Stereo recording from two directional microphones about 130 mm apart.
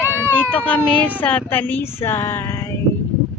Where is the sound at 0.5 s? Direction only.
10° left (ahead or behind).